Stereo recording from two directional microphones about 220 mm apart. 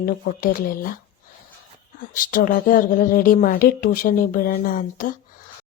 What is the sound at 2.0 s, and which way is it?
A woman's voice, 40° left (ahead or behind).